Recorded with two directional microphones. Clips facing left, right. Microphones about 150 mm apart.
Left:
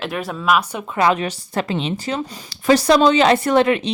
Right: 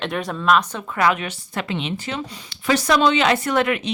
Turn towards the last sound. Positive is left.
turn(degrees=30)  # may be behind; listen again after turning